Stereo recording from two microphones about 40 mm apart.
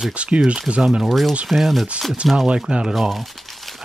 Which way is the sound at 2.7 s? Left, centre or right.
Right.